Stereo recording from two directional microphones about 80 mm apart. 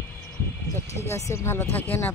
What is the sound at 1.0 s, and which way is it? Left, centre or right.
Speech, left.